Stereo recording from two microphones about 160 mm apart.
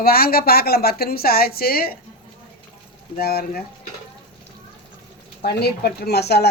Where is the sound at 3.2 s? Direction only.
75° left (ahead or behind).